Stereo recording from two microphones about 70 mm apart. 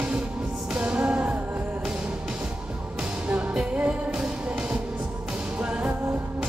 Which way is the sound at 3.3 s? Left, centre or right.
Centre.